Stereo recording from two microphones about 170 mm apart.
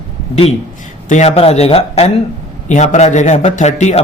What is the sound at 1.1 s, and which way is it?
A man's voice, 40° left (ahead or behind).